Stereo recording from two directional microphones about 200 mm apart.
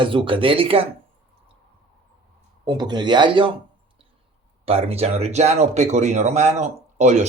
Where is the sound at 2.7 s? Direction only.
20° right (ahead or behind).